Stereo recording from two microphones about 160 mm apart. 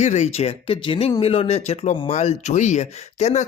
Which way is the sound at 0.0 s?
45° left (ahead or behind).